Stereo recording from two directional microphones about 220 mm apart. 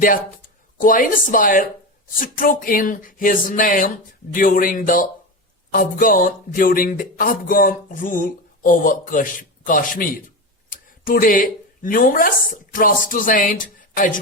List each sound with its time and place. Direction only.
0.8 s speech: 40° left (ahead or behind)